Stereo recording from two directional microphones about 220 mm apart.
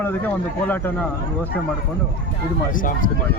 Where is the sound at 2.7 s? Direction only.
40° left (ahead or behind).